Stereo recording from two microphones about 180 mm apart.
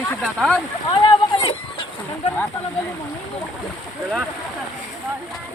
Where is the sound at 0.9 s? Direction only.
25° left (ahead or behind).